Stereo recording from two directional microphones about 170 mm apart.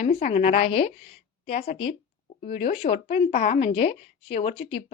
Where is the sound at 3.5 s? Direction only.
35° left (ahead or behind).